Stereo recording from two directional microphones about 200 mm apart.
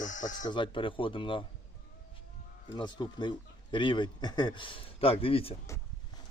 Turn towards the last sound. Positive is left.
turn(degrees=30)  # may be behind; listen again after turning